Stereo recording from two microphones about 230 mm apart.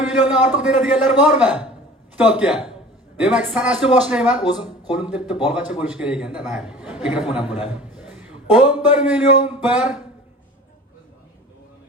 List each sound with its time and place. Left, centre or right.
0.1 s a man's voice: centre